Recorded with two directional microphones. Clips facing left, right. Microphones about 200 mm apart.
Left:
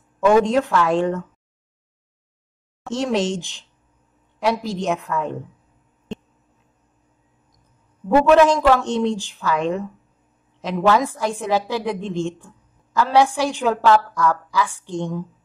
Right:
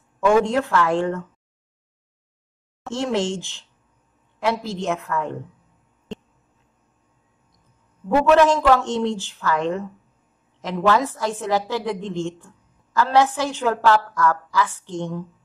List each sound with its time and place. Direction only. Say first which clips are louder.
0.2 s a woman's voice: left 2 dB; 20° left (ahead or behind)
2.9 s a woman's voice: left 2 dB; 20° left (ahead or behind)
8.3 s a woman's voice: left 1 dB; 15° left (ahead or behind)